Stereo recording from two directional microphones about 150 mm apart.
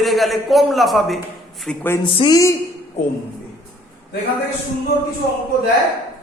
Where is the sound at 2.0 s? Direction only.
35° left (ahead or behind).